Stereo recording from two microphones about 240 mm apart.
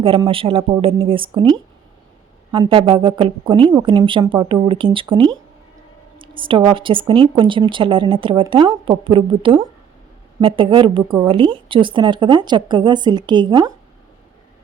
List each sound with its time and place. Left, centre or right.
0.0 s speech: right